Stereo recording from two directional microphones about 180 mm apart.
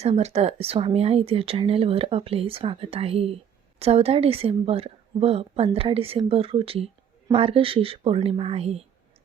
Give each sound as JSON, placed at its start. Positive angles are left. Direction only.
{"t": 0.0, "sound": "speech", "side_deg": -35}